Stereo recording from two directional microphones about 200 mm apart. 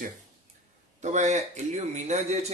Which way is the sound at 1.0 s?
35° right (ahead or behind).